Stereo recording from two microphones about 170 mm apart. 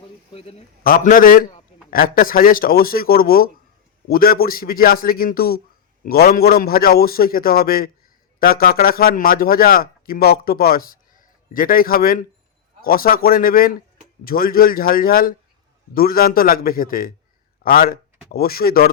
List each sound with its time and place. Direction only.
0.9 s a man's voice: 55° left (ahead or behind)